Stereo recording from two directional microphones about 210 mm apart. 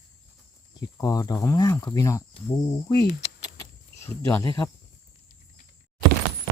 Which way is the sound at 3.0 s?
15° left (ahead or behind).